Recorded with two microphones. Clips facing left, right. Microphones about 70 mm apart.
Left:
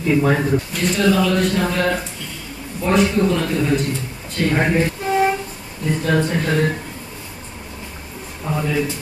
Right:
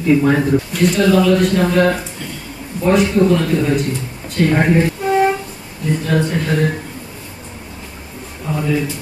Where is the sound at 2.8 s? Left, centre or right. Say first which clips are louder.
Right 3 dB; centre.